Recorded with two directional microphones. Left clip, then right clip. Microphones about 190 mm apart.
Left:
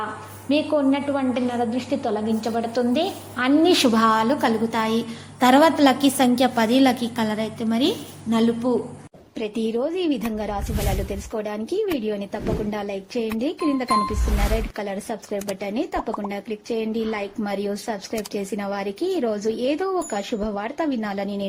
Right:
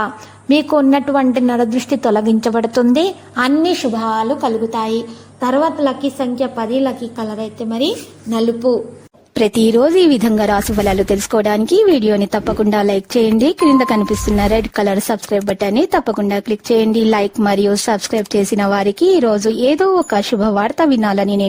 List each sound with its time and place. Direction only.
0.4 s a woman's voice: 50° right (ahead or behind)
3.8 s a woman's voice: centre (ahead or behind)
5.4 s a woman's voice: 30° left (ahead or behind)
7.2 s a woman's voice: 5° left (ahead or behind)
7.7 s a woman's voice: 15° right (ahead or behind)
9.3 s a woman's voice: 70° right (ahead or behind)